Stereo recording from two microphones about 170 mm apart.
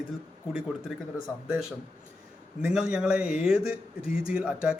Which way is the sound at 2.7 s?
5° right (ahead or behind).